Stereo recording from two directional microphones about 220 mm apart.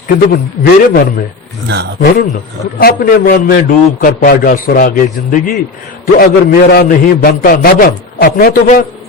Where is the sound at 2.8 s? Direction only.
45° left (ahead or behind).